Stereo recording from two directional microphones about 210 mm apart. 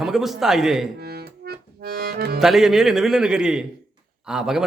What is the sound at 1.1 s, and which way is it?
Accordion, 50° right (ahead or behind).